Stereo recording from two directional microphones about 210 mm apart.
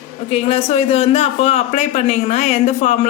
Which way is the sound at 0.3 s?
30° left (ahead or behind).